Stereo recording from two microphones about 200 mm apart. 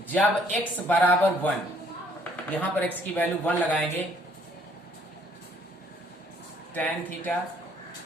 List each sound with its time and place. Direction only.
0.1 s speech: 10° left (ahead or behind)
2.6 s speech: 10° left (ahead or behind)
6.7 s speech: 5° left (ahead or behind)